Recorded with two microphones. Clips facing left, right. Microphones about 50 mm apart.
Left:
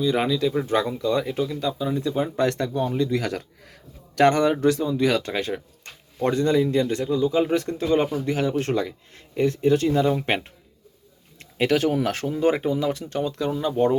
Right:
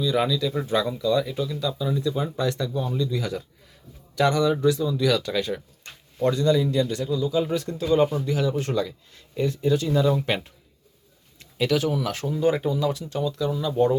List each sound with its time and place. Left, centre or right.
0.0 s speech: left
4.9 s speech: left